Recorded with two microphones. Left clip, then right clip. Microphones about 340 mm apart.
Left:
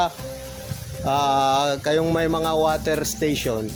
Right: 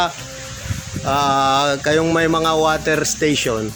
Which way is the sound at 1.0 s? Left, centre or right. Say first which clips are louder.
Right 3 dB; left.